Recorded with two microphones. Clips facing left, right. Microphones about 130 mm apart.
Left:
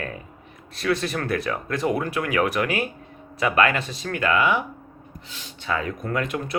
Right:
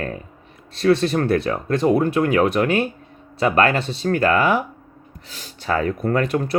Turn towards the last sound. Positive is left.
turn(degrees=-35)  # may be behind; listen again after turning